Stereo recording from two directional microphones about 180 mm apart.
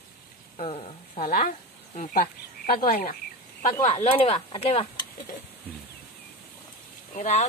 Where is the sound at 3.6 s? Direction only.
35° left (ahead or behind).